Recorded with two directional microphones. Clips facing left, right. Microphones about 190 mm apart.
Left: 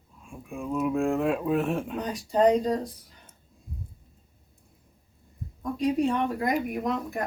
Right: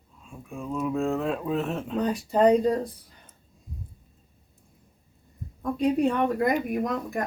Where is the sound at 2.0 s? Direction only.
60° right (ahead or behind).